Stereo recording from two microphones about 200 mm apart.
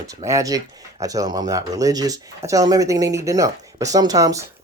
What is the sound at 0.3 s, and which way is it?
Speech, 15° right (ahead or behind).